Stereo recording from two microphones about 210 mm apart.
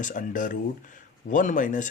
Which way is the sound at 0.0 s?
40° left (ahead or behind).